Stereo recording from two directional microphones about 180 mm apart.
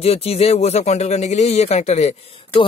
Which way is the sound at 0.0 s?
35° left (ahead or behind).